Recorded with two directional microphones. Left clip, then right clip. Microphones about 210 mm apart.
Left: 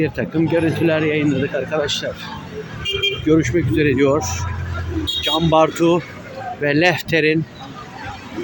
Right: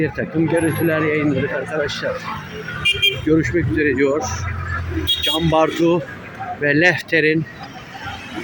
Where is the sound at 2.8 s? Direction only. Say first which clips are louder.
Right 4 dB; 55° right (ahead or behind).